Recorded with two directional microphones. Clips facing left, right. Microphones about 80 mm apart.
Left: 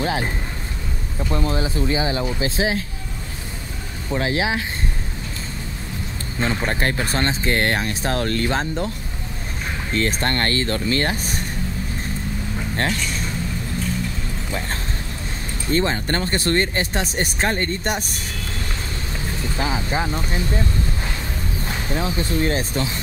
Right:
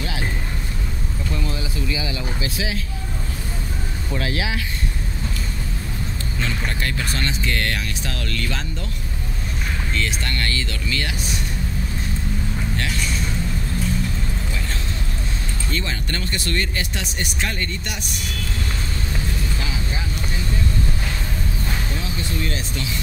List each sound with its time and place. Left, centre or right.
0.0 s a sound: left
1.3 s speech: left
4.1 s speech: left
6.4 s speech: left
9.9 s speech: left
15.7 s speech: left
19.4 s speech: left
21.6 s speech: left